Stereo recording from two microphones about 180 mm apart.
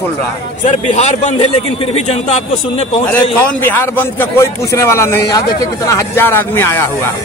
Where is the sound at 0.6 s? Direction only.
40° left (ahead or behind).